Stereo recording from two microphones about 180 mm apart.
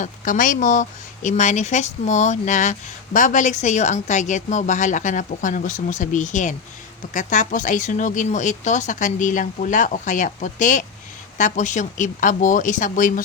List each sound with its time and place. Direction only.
0.0 s speech: 45° left (ahead or behind)